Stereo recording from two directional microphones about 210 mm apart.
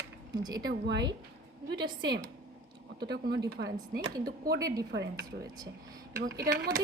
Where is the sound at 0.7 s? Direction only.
55° right (ahead or behind).